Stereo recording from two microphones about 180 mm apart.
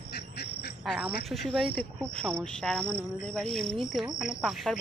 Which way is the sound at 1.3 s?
Centre (ahead or behind).